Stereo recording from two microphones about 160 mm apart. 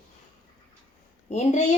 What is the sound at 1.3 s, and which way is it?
Speech, 45° left (ahead or behind).